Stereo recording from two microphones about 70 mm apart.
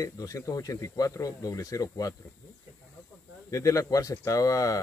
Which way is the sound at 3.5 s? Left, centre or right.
Left.